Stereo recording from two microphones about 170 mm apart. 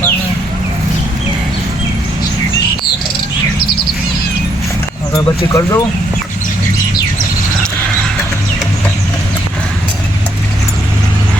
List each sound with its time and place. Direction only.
5.5 s speech: 15° left (ahead or behind)